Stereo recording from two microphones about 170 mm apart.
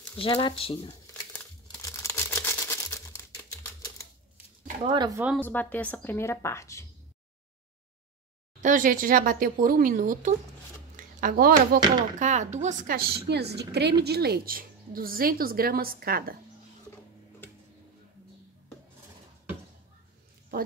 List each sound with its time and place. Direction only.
0.2 s speech: 30° left (ahead or behind)
1.9 s crumpling: 15° left (ahead or behind)
4.8 s speech: 25° right (ahead or behind)
5.4 s a woman's voice: 10° left (ahead or behind)
8.5 s a woman's voice: 50° right (ahead or behind)
12.2 s a woman's voice: 45° right (ahead or behind); by 16.3 s 60° right (ahead or behind)